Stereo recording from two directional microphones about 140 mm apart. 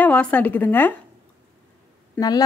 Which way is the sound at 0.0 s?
10° left (ahead or behind).